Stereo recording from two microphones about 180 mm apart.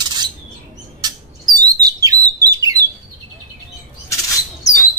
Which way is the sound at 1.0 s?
20° right (ahead or behind).